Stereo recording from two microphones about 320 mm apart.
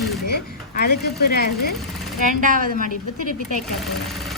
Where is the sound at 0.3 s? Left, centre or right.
Left.